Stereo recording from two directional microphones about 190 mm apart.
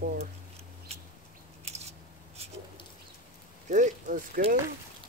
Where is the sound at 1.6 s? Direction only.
35° right (ahead or behind).